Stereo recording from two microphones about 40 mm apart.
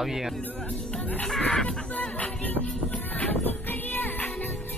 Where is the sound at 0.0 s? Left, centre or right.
Centre.